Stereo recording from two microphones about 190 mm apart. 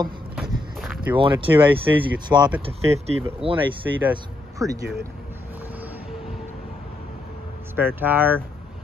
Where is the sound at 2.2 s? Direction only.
20° right (ahead or behind).